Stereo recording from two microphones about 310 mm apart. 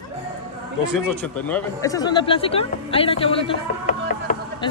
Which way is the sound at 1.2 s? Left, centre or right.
Centre.